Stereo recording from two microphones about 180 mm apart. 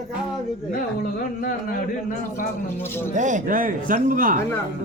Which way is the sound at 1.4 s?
50° left (ahead or behind).